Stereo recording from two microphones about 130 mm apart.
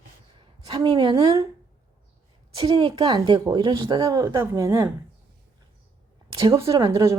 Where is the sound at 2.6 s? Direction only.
35° right (ahead or behind).